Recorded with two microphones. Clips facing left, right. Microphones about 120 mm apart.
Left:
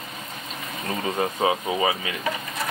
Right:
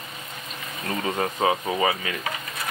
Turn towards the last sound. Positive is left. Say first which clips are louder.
# even
turn(degrees=20)  # may be behind; listen again after turning